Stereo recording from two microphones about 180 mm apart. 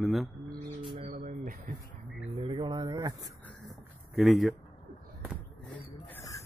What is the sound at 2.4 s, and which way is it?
Speech, 25° right (ahead or behind).